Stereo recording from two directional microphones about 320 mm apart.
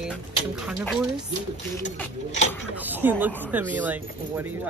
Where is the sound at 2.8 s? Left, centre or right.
Centre.